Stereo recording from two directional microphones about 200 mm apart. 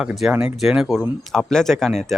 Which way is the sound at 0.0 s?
Centre (ahead or behind).